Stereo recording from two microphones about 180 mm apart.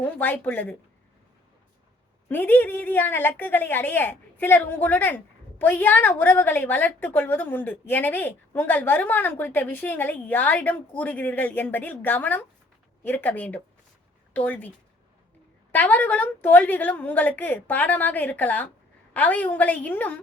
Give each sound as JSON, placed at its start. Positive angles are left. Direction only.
{"t": 0.0, "sound": "a woman's voice", "side_deg": 10}
{"t": 2.3, "sound": "a woman's voice", "side_deg": 10}
{"t": 15.7, "sound": "a woman's voice", "side_deg": 10}